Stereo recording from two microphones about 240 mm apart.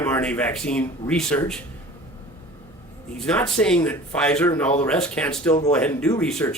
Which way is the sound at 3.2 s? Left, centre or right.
Centre.